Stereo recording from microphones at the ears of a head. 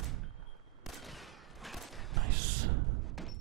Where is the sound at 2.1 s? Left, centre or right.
Right.